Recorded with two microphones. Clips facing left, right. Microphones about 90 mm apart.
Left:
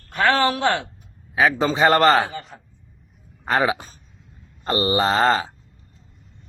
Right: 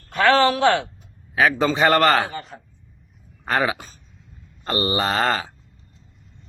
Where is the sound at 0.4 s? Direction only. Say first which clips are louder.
Right 3 dB; 25° left (ahead or behind).